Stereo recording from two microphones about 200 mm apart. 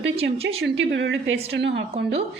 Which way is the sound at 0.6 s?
60° right (ahead or behind).